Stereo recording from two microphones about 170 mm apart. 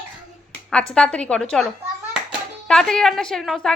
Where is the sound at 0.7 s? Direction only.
5° left (ahead or behind).